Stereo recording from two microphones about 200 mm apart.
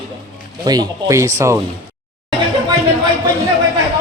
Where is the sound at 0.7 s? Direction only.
15° right (ahead or behind).